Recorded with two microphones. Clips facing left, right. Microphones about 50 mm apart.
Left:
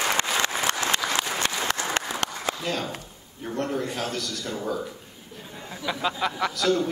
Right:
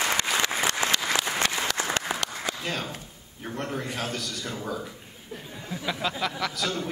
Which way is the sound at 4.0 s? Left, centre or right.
Centre.